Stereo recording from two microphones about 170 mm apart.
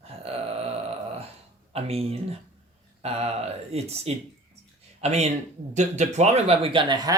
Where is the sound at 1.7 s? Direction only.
35° right (ahead or behind).